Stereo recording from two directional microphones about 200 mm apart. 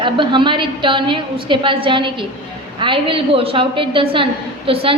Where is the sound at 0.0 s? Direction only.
25° right (ahead or behind).